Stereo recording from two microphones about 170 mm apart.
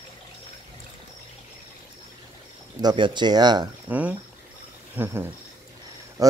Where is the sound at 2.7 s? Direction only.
25° right (ahead or behind).